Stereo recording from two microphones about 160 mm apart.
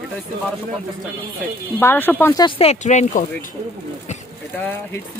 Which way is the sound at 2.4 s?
35° left (ahead or behind).